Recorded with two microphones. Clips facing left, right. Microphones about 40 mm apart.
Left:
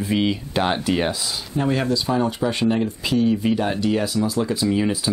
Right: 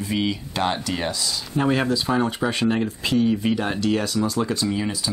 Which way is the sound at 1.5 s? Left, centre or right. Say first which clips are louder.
Even; centre.